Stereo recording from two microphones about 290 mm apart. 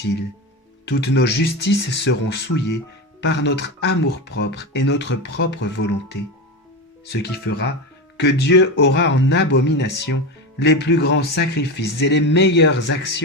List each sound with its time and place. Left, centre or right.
0.9 s speech: left
6.1 s speech: left
7.1 s speech: left